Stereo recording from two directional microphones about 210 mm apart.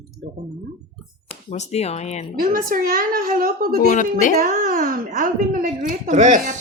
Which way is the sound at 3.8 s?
35° left (ahead or behind).